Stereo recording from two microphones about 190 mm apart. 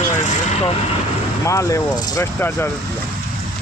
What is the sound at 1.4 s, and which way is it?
Speech, 15° left (ahead or behind).